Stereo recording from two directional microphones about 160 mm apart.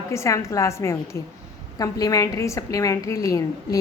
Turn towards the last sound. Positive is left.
turn(degrees=20)  # may be behind; listen again after turning